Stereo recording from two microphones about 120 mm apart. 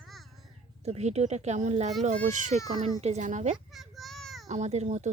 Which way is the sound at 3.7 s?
Centre (ahead or behind).